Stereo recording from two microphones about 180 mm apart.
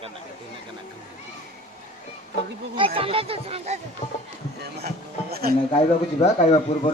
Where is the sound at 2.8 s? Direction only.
30° right (ahead or behind).